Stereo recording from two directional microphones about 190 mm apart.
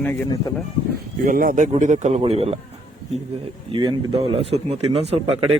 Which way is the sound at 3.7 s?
25° right (ahead or behind).